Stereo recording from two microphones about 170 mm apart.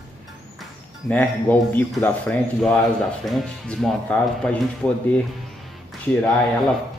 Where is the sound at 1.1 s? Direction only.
10° left (ahead or behind).